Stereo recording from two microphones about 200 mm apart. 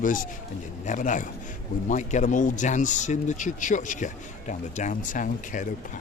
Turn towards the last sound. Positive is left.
turn(degrees=40)  # may be behind; listen again after turning